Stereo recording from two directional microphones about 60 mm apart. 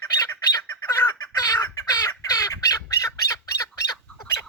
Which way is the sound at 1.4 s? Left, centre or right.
Left.